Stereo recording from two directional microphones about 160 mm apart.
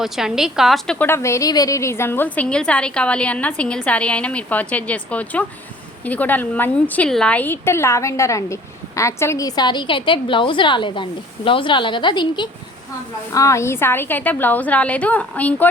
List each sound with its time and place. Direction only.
0.0 s a woman's voice: 5° right (ahead or behind)
0.9 s a woman's voice: 15° left (ahead or behind)